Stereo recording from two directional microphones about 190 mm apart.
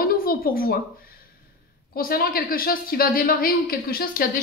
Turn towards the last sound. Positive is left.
turn(degrees=50)  # may be behind; listen again after turning